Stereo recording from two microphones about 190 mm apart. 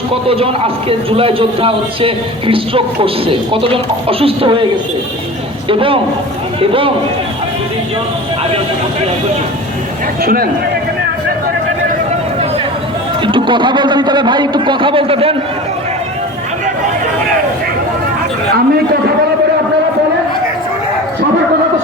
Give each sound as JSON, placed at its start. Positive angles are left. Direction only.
{"t": 0.1, "sound": "a man's voice", "side_deg": -30}
{"t": 5.6, "sound": "a man's voice", "side_deg": -30}
{"t": 10.2, "sound": "speech", "side_deg": -50}
{"t": 13.2, "sound": "a man's voice", "side_deg": -25}